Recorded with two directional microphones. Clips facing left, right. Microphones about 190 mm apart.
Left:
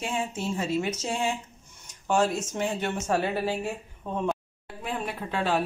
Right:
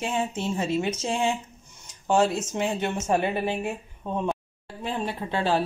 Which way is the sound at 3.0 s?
20° right (ahead or behind).